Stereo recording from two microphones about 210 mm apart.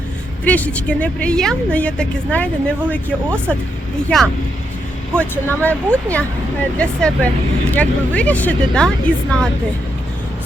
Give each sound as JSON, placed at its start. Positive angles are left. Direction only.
{"t": 0.4, "sound": "a woman's voice", "side_deg": 5}
{"t": 6.7, "sound": "a woman's voice", "side_deg": 5}